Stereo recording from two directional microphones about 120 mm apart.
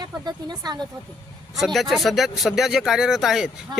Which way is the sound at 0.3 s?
35° right (ahead or behind).